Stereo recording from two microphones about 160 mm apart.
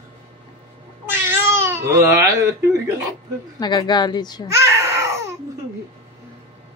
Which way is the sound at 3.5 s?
25° left (ahead or behind).